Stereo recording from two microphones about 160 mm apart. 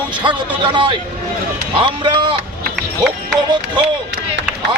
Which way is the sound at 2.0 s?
30° right (ahead or behind).